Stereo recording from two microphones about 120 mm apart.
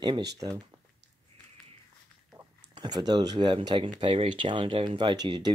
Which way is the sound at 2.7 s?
35° right (ahead or behind).